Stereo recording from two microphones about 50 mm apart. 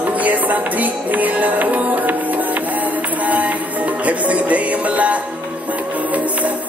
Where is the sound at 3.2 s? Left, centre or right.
Right.